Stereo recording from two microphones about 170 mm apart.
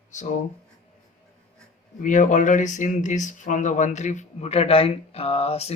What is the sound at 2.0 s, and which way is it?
Speech, 45° left (ahead or behind).